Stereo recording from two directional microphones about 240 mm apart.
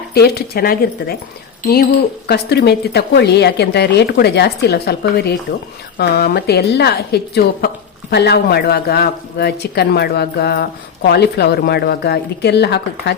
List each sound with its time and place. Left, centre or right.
0.1 s a woman's voice: left